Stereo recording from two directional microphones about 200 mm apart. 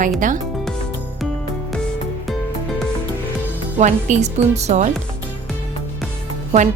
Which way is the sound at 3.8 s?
35° right (ahead or behind).